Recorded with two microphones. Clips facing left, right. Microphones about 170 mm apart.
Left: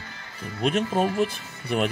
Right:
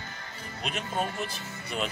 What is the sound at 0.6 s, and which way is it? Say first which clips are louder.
Speech: left 9 dB; 50° left (ahead or behind).